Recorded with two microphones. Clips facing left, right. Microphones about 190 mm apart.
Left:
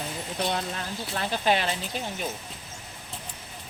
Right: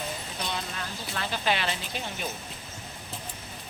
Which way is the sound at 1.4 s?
45° left (ahead or behind).